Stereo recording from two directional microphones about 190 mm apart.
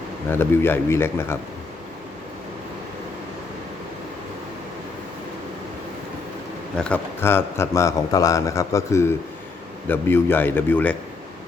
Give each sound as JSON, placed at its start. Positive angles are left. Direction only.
{"t": 0.3, "sound": "a man's voice", "side_deg": 10}
{"t": 6.7, "sound": "a man's voice", "side_deg": 5}